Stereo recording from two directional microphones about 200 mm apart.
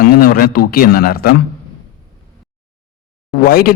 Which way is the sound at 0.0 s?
45° left (ahead or behind).